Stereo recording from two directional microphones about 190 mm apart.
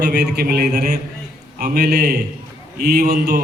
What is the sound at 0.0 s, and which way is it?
A man's voice, 60° right (ahead or behind).